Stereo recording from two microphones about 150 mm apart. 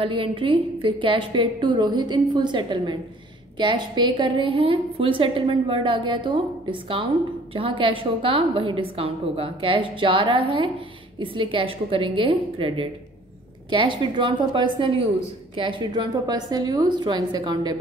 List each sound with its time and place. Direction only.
0.0 s a woman's voice: 35° right (ahead or behind)